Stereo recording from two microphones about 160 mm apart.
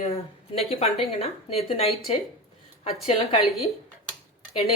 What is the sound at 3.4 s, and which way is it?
Speech, centre (ahead or behind).